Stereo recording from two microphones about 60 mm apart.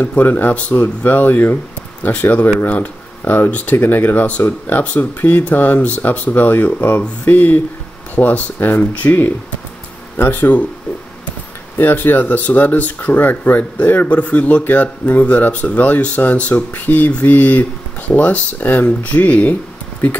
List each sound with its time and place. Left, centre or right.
0.0 s speech: left
11.8 s speech: left